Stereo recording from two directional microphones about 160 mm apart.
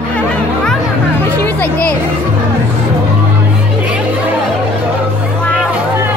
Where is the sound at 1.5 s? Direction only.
10° left (ahead or behind).